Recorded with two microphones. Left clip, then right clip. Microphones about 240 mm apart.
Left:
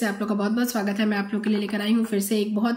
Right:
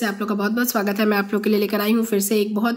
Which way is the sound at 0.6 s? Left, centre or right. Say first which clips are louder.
Right 4 dB; centre.